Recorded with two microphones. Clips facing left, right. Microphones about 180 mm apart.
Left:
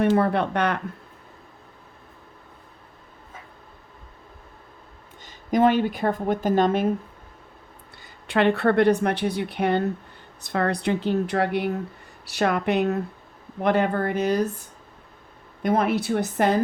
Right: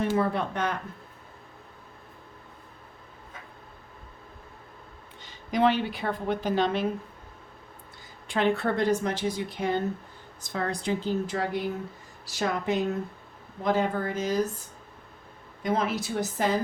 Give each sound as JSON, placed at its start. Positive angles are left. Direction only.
{"t": 0.2, "sound": "a woman's voice", "side_deg": 65}
{"t": 5.2, "sound": "speech", "side_deg": 45}
{"t": 8.0, "sound": "a woman's voice", "side_deg": 65}
{"t": 15.6, "sound": "a woman's voice", "side_deg": 60}